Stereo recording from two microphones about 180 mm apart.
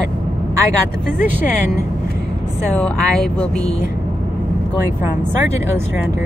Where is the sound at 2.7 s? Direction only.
5° left (ahead or behind).